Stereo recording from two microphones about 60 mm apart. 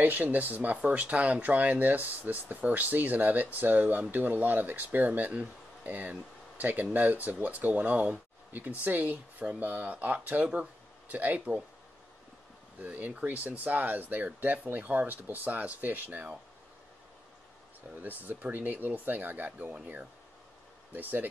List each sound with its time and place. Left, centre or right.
0.0 s speech: right
12.8 s speech: right
18.0 s speech: right
20.9 s speech: right